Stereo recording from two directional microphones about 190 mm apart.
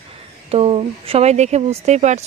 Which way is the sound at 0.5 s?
30° right (ahead or behind).